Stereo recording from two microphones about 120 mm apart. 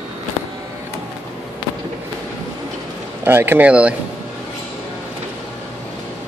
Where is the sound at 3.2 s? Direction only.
20° right (ahead or behind).